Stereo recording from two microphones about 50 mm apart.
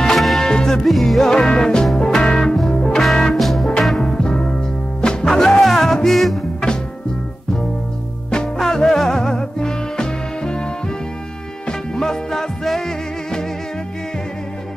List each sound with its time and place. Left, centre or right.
0.0 s music: centre
0.4 s music: centre
0.8 s music: centre
3.3 s music: centre
8.5 s music: centre
12.0 s music: centre